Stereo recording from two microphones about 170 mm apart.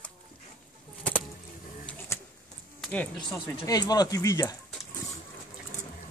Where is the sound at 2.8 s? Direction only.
10° left (ahead or behind).